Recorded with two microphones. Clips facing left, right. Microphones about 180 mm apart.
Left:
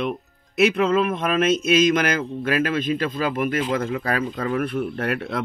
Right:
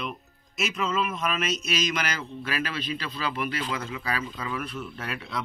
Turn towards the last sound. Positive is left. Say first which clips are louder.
# left 10 dB
turn(degrees=55)  # may be behind; listen again after turning